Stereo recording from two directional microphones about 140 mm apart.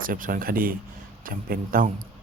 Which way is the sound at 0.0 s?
80° right.